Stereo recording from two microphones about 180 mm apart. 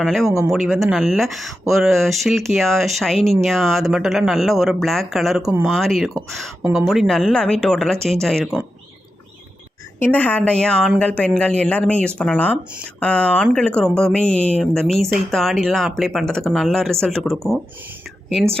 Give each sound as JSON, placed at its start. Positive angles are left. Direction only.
{"t": 0.0, "sound": "speech", "side_deg": 0}
{"t": 5.4, "sound": "speech", "side_deg": -20}
{"t": 5.6, "sound": "speech", "side_deg": 0}
{"t": 10.0, "sound": "a woman's voice", "side_deg": 10}